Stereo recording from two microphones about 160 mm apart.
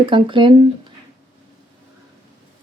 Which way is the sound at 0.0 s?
30° right (ahead or behind).